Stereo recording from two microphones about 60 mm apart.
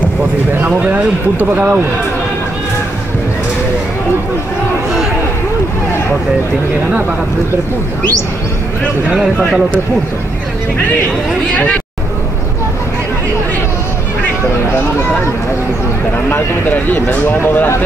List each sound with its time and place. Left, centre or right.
0.7 s speech: right
16.9 s speech: left